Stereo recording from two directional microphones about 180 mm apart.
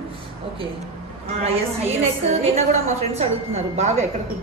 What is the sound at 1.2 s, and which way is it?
A woman's voice, 35° right (ahead or behind).